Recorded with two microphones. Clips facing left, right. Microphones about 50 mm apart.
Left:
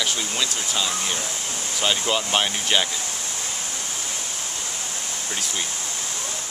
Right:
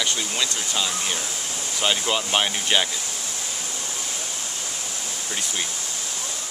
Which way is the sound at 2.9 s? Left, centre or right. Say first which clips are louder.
Left 1 dB; left.